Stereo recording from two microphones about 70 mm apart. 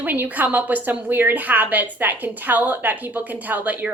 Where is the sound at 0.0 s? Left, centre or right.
Right.